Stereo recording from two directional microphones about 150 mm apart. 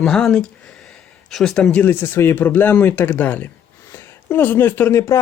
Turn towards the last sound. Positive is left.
turn(degrees=15)  # may be behind; listen again after turning